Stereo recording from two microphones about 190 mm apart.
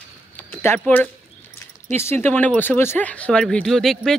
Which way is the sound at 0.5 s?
10° left (ahead or behind).